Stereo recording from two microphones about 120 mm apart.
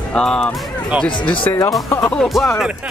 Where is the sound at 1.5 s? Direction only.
15° left (ahead or behind).